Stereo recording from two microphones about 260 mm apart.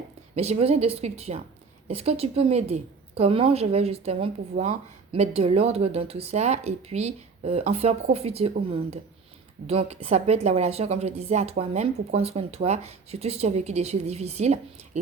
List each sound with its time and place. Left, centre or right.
0.3 s a woman's voice: right